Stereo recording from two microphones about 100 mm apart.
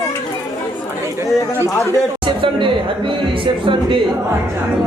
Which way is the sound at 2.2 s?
55° right (ahead or behind).